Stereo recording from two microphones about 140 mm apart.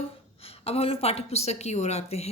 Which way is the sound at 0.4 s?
45° left (ahead or behind).